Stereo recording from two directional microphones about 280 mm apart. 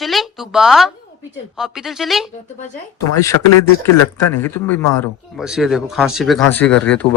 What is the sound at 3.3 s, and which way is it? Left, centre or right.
Speech, left.